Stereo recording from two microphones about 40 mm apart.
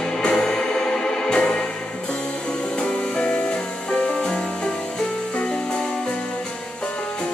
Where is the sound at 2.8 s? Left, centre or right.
Left.